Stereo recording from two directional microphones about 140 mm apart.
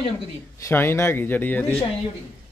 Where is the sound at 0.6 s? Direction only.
20° left (ahead or behind).